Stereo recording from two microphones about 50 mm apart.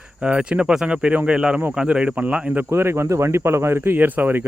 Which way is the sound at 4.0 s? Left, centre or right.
Right.